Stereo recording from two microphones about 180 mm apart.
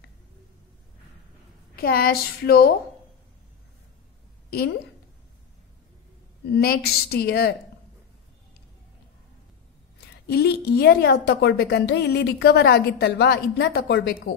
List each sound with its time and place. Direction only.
1.8 s a woman's voice: 55° left (ahead or behind)
4.5 s a woman's voice: 60° left (ahead or behind)
6.5 s a woman's voice: 60° left (ahead or behind)
9.9 s a woman's voice: 60° left (ahead or behind)